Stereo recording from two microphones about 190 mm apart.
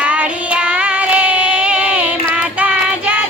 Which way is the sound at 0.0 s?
5° right (ahead or behind).